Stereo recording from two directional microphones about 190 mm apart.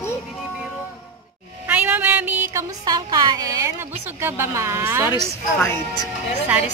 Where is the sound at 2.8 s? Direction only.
20° right (ahead or behind).